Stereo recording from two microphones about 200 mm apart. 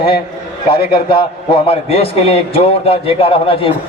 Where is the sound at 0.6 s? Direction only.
25° left (ahead or behind).